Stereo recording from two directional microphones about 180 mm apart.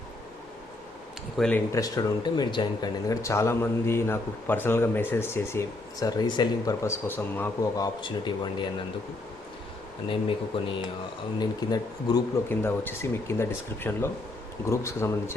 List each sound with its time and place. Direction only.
1.4 s speech: 5° left (ahead or behind)
1.7 s speech: 20° left (ahead or behind)
10.1 s speech: 30° left (ahead or behind)